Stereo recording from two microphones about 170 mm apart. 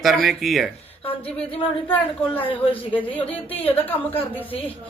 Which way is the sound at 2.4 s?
30° left (ahead or behind).